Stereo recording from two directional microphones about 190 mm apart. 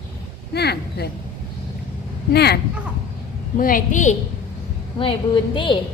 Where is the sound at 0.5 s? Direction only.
60° left (ahead or behind).